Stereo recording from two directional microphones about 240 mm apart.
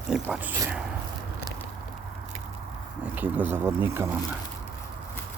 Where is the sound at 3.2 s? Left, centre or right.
Centre.